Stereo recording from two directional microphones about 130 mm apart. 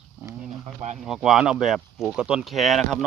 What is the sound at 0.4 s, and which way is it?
Bee, 60° right (ahead or behind).